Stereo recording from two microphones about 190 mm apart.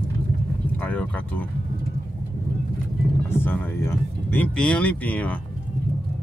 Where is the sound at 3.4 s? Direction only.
10° left (ahead or behind).